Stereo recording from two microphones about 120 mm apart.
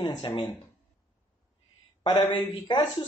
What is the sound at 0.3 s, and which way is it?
Speech, 40° left (ahead or behind).